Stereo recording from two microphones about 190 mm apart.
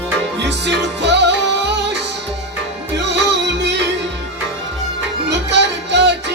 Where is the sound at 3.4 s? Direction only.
65° right (ahead or behind).